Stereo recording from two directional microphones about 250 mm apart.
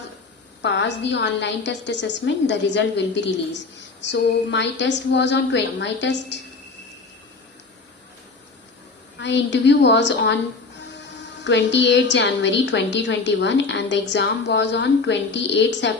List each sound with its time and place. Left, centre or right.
0.6 s a woman's voice: left
9.1 s a woman's voice: left
11.4 s a woman's voice: left